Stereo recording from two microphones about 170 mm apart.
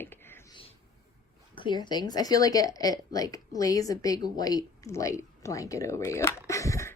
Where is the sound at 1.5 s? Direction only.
30° left (ahead or behind).